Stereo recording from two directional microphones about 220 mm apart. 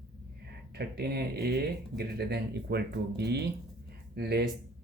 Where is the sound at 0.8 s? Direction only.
45° right (ahead or behind).